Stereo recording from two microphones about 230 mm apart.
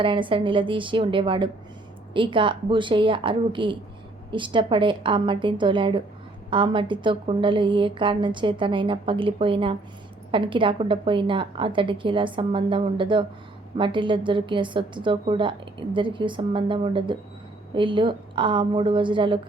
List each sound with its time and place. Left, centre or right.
0.0 s a woman's voice: right